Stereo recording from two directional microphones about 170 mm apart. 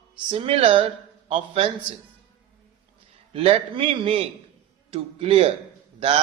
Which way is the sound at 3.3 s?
35° right (ahead or behind).